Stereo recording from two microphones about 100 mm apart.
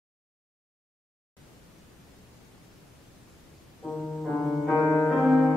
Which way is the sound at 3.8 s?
5° left (ahead or behind).